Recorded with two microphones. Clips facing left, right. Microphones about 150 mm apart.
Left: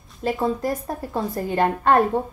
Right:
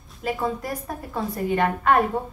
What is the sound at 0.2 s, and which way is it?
Speech, 30° left (ahead or behind).